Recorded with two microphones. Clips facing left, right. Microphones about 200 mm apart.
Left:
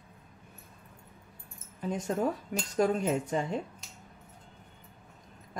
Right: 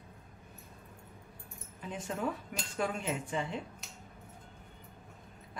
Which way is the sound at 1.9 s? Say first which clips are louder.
Left 6 dB; 40° left (ahead or behind).